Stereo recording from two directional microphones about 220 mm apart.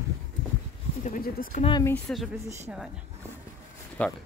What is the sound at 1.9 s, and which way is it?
A woman's voice, centre (ahead or behind).